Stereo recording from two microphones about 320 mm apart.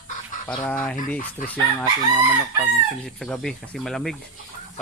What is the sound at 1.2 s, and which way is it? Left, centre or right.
Speech, left.